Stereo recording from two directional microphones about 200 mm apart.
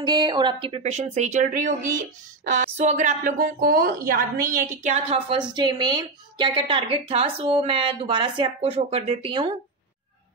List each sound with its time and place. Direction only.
0.0 s speech: 20° right (ahead or behind); by 4.6 s 45° right (ahead or behind)
4.8 s speech: 30° right (ahead or behind)
5.5 s a woman's voice: 20° right (ahead or behind)